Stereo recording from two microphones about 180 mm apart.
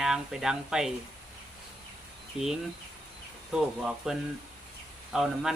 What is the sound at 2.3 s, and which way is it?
Speech, 5° right (ahead or behind).